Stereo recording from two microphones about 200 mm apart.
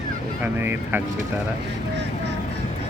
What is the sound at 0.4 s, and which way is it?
Speech, 10° right (ahead or behind).